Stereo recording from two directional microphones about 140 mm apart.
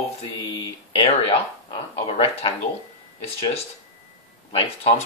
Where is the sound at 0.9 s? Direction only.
40° left (ahead or behind).